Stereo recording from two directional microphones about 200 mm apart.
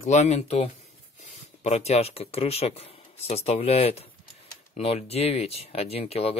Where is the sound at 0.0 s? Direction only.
35° left (ahead or behind).